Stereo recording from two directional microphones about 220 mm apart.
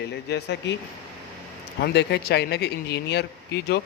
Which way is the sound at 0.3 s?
50° left (ahead or behind).